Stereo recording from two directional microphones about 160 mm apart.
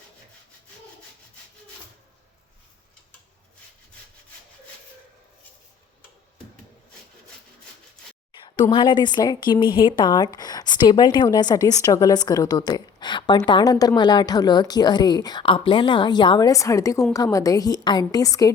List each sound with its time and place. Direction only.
8.7 s speech: 30° left (ahead or behind)